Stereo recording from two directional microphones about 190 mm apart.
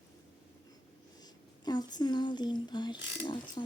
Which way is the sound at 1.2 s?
20° left (ahead or behind).